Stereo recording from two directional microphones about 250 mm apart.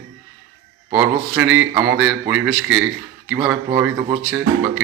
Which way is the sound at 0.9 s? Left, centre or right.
Centre.